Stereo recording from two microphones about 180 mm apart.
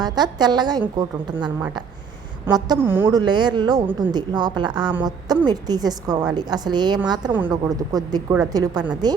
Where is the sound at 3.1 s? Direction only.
25° right (ahead or behind).